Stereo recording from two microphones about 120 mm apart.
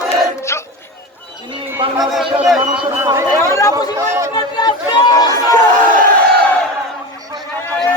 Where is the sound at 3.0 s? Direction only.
20° right (ahead or behind).